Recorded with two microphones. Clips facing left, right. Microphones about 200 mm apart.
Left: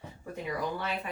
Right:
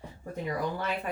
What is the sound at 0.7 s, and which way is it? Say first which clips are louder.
Speech: right 2 dB; 45° right (ahead or behind).